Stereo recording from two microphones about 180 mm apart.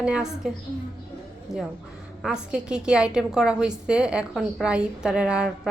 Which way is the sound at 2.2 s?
5° right (ahead or behind).